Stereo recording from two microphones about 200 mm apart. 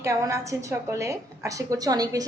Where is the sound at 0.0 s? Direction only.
15° right (ahead or behind).